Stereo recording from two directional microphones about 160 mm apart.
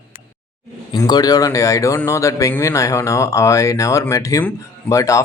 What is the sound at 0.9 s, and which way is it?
Speech, 25° left (ahead or behind).